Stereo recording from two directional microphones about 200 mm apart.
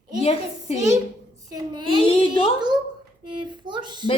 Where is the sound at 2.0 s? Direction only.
25° left (ahead or behind).